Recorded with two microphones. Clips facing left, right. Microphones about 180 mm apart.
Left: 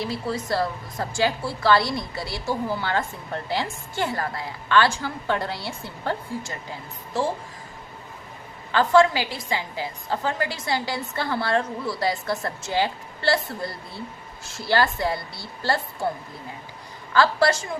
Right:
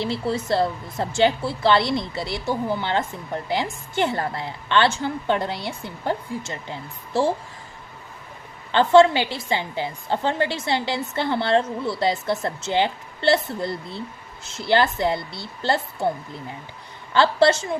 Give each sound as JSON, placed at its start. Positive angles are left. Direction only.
{"t": 0.0, "sound": "a woman's voice", "side_deg": -25}
{"t": 8.7, "sound": "a woman's voice", "side_deg": -25}
{"t": 17.1, "sound": "a woman's voice", "side_deg": -25}